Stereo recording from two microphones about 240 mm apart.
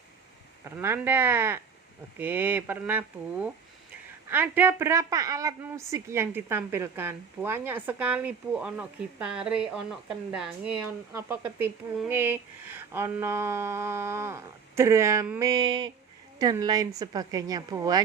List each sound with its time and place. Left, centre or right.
0.6 s a woman's voice: centre